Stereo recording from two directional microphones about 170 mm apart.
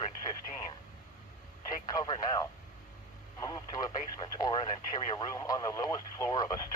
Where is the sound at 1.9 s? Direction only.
25° left (ahead or behind).